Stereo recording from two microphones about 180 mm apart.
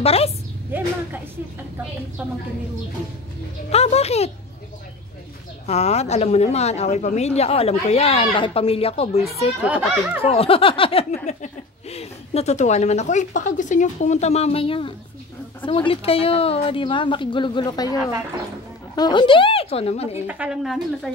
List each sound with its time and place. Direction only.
0.0 s speech: 35° left (ahead or behind)
0.7 s speech: 10° right (ahead or behind)
3.7 s speech: 35° left (ahead or behind)
5.7 s speech: 35° left (ahead or behind)
9.6 s speech: 5° right (ahead or behind)
10.2 s a woman's voice: 35° left (ahead or behind)
18.9 s speech: 25° left (ahead or behind)
20.2 s a woman's voice: 5° right (ahead or behind)